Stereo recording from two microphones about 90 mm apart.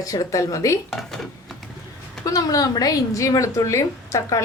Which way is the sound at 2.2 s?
40° left (ahead or behind).